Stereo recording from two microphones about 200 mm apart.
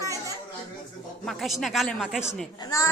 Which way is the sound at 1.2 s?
Centre (ahead or behind).